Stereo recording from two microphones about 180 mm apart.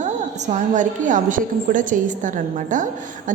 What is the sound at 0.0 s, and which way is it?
A woman's voice, 40° right (ahead or behind).